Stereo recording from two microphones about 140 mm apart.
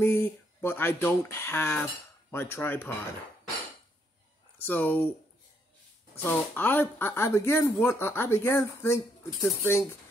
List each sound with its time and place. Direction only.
0.0 s speech: 15° left (ahead or behind)
4.6 s speech: 15° left (ahead or behind)
6.2 s speech: 15° left (ahead or behind)